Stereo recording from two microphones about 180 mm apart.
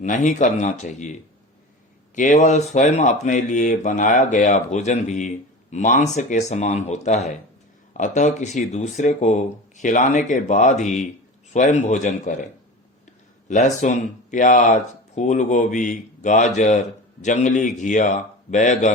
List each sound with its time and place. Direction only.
0.0 s speech: 45° left (ahead or behind)
2.1 s speech: 45° left (ahead or behind)
13.5 s speech: 40° left (ahead or behind)